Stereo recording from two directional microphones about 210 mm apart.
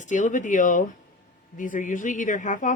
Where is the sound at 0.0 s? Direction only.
35° left (ahead or behind).